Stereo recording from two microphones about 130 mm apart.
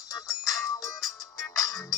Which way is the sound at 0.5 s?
25° left (ahead or behind).